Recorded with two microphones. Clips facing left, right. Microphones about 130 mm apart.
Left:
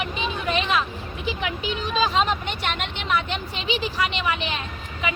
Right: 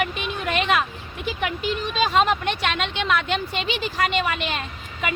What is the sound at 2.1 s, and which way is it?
Speech, 75° right (ahead or behind).